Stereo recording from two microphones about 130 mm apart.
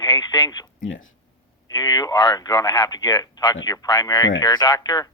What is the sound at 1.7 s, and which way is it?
Speech, 30° left (ahead or behind).